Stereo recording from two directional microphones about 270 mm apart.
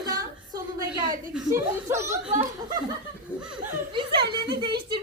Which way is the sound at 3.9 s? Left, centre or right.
Centre.